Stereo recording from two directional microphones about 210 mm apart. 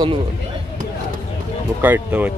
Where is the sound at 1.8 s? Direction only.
10° right (ahead or behind).